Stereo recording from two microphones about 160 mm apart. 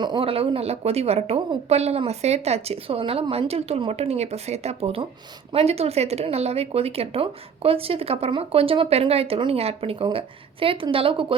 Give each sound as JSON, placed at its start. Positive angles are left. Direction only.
{"t": 0.0, "sound": "speech", "side_deg": -30}